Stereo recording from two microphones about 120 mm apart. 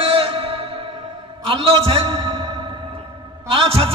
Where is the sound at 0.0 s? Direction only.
50° right (ahead or behind).